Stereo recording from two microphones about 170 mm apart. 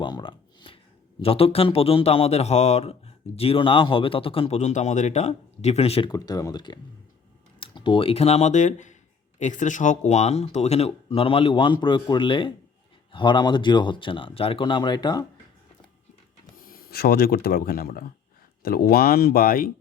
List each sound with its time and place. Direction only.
0.0 s a sound: 25° left (ahead or behind)
1.2 s speech: 35° left (ahead or behind)
16.6 s speech: 60° left (ahead or behind)